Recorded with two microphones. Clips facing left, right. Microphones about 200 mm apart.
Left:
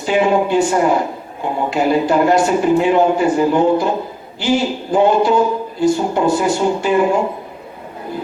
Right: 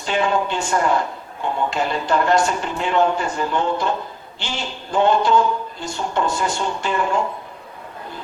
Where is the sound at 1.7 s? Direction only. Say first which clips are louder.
Left 10 dB; 10° left (ahead or behind).